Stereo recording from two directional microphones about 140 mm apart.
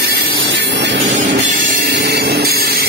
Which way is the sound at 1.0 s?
65° right (ahead or behind).